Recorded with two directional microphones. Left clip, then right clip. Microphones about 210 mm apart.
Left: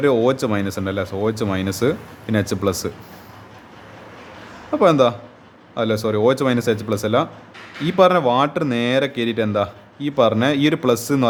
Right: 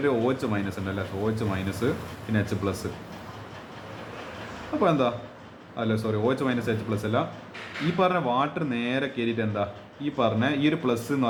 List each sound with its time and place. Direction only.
0.0 s speech: 50° left (ahead or behind)
4.8 s speech: 50° left (ahead or behind)